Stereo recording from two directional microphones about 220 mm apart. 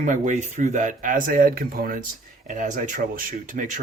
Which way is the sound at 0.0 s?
35° right (ahead or behind).